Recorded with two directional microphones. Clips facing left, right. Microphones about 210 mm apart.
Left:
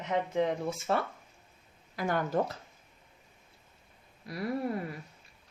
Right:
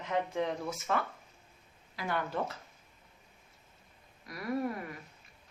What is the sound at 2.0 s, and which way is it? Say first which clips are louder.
Speech: left 5 dB; 45° left (ahead or behind).